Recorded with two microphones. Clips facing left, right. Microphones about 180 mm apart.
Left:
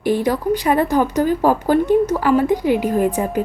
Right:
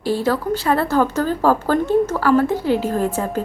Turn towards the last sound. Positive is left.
turn(degrees=15)  # may be behind; listen again after turning